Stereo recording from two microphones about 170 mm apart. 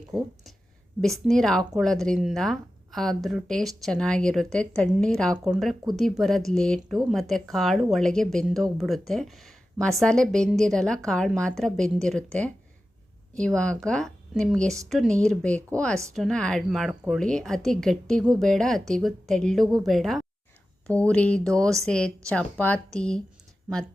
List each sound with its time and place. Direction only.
0.1 s speech: centre (ahead or behind)